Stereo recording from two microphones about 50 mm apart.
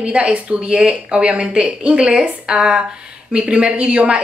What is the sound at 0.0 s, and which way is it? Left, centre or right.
A woman's voice, right.